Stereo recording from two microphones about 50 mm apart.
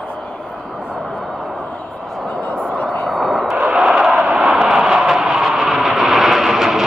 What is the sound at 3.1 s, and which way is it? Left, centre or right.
Vehicle, centre.